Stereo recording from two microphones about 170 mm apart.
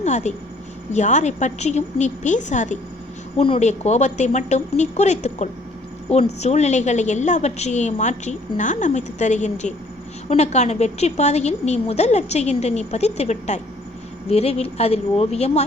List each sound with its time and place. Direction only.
0.0 s a woman's voice: 45° left (ahead or behind)
3.3 s a woman's voice: 35° left (ahead or behind)